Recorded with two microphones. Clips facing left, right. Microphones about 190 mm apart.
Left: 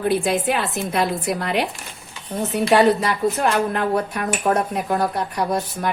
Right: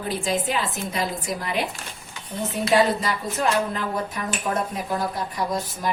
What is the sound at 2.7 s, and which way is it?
A woman's voice, 60° left (ahead or behind).